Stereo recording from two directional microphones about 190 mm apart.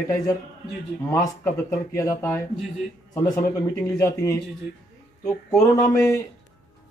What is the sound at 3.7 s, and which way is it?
Speech, 15° left (ahead or behind).